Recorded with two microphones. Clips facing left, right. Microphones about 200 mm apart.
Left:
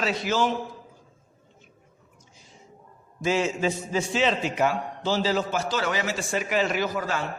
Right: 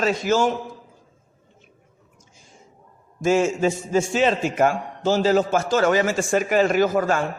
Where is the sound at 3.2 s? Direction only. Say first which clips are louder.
Right 5 dB; 45° right (ahead or behind).